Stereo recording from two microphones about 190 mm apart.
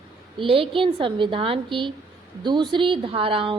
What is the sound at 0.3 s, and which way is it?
A woman's voice, 30° right (ahead or behind).